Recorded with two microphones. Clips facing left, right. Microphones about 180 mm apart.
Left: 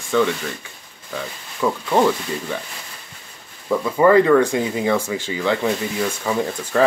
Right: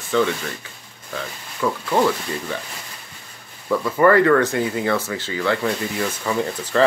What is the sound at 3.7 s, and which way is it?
Speech, 15° left (ahead or behind).